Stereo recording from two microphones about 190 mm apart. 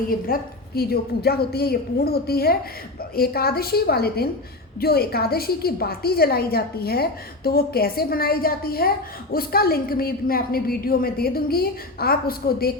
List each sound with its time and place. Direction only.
0.3 s a woman's voice: 50° left (ahead or behind)